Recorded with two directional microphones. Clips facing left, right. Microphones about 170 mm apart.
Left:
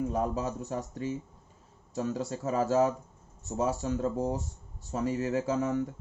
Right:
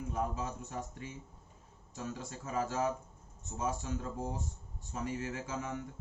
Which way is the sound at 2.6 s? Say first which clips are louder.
Left 7 dB; 40° left (ahead or behind).